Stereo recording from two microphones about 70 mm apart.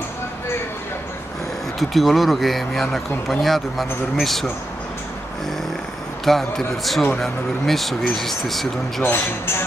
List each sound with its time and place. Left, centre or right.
1.8 s a man's voice: centre
6.2 s a man's voice: centre
9.0 s speech: left